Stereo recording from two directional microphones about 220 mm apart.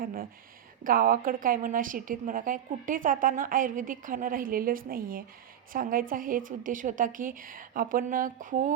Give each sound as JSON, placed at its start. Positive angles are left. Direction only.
{"t": 0.0, "sound": "a woman's voice", "side_deg": -40}